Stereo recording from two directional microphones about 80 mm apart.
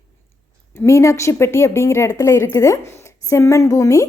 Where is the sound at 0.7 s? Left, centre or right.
Left.